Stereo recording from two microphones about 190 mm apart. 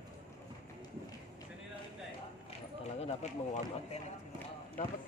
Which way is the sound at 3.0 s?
35° left (ahead or behind).